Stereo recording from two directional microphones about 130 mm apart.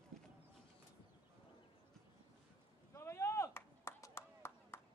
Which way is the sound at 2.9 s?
20° left (ahead or behind).